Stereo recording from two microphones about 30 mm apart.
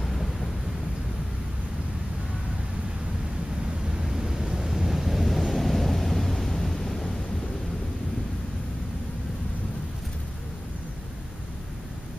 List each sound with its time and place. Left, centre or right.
0.0 s vehicle: centre
3.9 s a sound: right
5.2 s vehicle: centre